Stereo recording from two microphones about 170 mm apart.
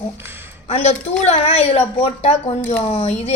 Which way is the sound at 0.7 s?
40° left (ahead or behind).